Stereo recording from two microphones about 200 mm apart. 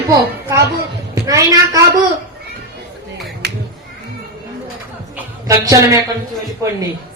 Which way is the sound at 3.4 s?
55° right (ahead or behind).